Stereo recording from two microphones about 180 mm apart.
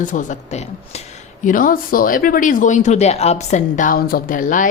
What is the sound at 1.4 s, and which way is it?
Speech, 50° left (ahead or behind).